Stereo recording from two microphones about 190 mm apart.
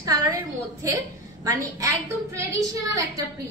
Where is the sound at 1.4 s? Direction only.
15° right (ahead or behind).